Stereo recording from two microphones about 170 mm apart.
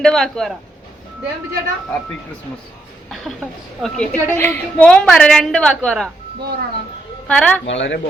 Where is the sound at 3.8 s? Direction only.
5° left (ahead or behind).